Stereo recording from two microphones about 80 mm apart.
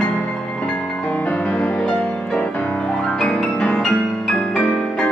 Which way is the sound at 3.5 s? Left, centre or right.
Centre.